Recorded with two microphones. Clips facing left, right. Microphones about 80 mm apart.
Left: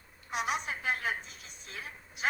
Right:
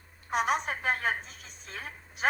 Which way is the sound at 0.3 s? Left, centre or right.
Right.